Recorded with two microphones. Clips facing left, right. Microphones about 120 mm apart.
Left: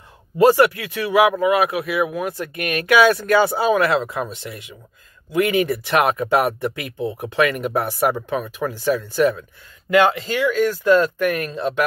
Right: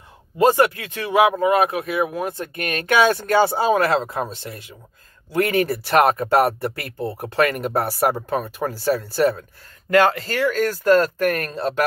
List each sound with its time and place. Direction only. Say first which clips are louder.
0.4 s speech: left 2 dB; 20° right (ahead or behind); by 11.8 s 40° right (ahead or behind)